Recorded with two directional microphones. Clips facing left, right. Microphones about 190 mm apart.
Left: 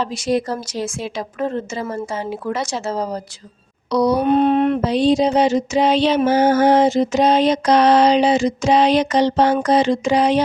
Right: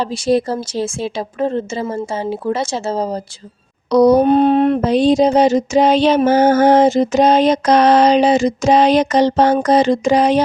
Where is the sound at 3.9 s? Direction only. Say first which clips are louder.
Right 6 dB; 45° right (ahead or behind).